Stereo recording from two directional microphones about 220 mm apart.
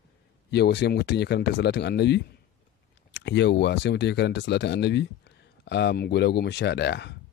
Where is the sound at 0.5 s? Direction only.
50° left (ahead or behind).